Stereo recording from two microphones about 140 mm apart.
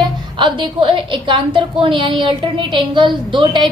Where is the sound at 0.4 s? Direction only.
35° right (ahead or behind).